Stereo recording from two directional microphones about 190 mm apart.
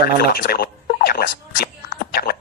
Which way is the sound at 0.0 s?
55° left (ahead or behind).